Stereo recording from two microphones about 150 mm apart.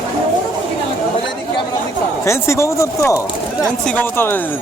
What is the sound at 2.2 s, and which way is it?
Speech, 20° left (ahead or behind).